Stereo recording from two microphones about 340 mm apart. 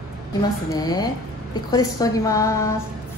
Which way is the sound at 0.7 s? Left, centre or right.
Centre.